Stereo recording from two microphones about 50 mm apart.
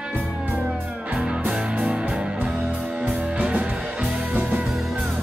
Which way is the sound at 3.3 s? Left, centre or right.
Right.